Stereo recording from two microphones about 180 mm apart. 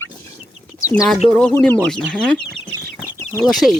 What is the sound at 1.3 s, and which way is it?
Speech, 5° left (ahead or behind).